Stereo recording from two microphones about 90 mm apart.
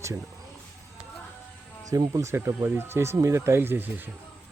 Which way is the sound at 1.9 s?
40° right (ahead or behind).